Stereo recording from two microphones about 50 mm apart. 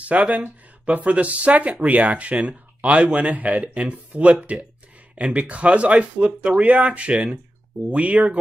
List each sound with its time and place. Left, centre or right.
0.0 s speech: right